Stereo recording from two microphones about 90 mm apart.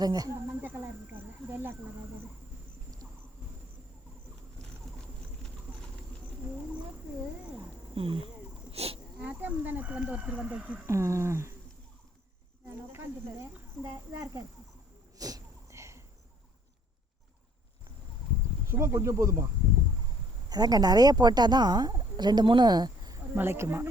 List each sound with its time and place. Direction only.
0.0 s a woman's voice: 45° right (ahead or behind)
0.6 s snake: 25° right (ahead or behind)
7.9 s insect: 90° right
9.2 s speech: 20° right (ahead or behind)
10.8 s speech: 30° right (ahead or behind)
12.9 s speech: 30° right (ahead or behind)
15.2 s sneeze: 40° right (ahead or behind)
18.7 s speech: 30° right (ahead or behind)
20.5 s a woman's voice: 45° right (ahead or behind)
23.1 s speech: 25° right (ahead or behind)